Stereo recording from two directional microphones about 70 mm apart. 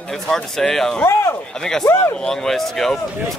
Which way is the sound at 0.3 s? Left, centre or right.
Centre.